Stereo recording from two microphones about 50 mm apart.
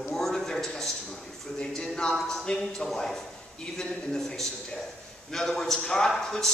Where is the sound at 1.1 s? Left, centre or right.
Centre.